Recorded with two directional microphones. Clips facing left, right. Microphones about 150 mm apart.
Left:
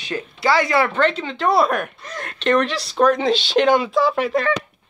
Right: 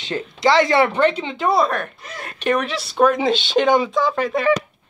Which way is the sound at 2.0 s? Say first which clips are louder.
Right 1 dB; 10° right (ahead or behind).